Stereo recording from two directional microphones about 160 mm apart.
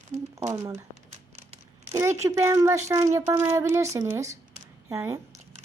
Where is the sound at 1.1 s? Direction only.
45° right (ahead or behind).